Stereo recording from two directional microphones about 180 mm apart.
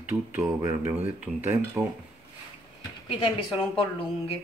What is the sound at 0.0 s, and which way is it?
Speech, 10° right (ahead or behind).